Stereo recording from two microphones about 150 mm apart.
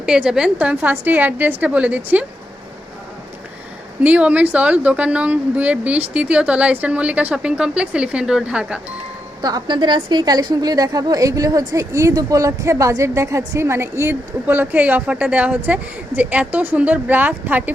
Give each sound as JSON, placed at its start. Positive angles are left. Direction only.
{"t": 0.0, "sound": "speech", "side_deg": -5}
{"t": 4.0, "sound": "speech", "side_deg": -10}
{"t": 9.4, "sound": "a woman's voice", "side_deg": -25}